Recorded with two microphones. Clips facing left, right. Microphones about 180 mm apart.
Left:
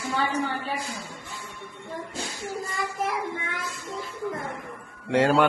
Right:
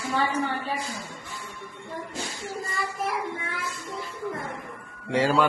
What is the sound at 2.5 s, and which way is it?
Child singing, 15° left (ahead or behind).